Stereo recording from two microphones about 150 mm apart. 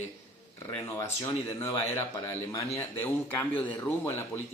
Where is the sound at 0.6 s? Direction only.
20° left (ahead or behind).